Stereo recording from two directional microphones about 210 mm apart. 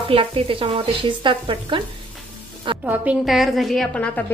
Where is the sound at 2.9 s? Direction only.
5° right (ahead or behind).